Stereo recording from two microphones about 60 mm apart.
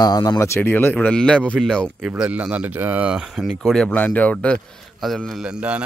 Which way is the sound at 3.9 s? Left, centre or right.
Left.